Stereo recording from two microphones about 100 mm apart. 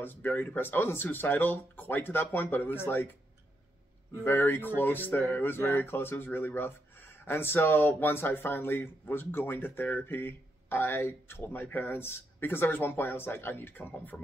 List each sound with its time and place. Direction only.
0.0 s speech: 20° left (ahead or behind)
4.2 s speech: 20° left (ahead or behind)